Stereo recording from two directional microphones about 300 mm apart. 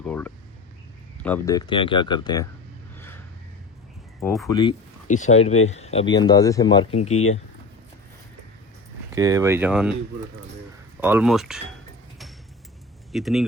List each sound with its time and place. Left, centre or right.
0.0 s speech: centre
4.2 s speech: centre
4.4 s speech: centre
5.0 s speech: left
9.1 s speech: centre
11.0 s speech: centre
13.1 s speech: centre